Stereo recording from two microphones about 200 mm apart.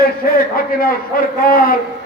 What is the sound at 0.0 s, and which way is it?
A man's voice, 45° left (ahead or behind).